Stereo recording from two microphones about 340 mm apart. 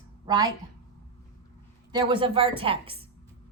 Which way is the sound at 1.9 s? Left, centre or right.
Centre.